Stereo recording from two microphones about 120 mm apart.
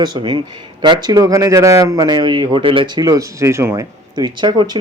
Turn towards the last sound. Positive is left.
turn(degrees=-35)  # may be behind; listen again after turning